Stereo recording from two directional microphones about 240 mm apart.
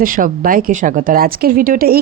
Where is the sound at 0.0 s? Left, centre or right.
Right.